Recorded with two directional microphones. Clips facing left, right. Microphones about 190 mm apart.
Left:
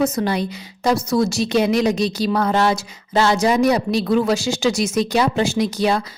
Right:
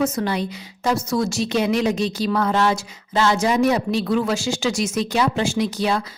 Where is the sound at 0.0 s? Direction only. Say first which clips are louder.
Left 2 dB; 40° left (ahead or behind).